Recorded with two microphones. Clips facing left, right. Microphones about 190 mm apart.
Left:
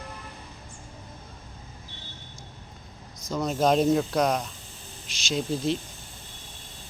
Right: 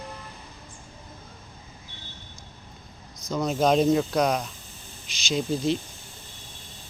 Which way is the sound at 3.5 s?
Centre (ahead or behind).